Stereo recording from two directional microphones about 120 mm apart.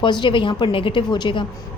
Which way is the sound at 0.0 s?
40° left (ahead or behind).